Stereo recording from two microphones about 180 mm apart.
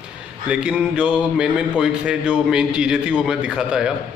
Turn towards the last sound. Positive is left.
turn(degrees=-5)  # may be behind; listen again after turning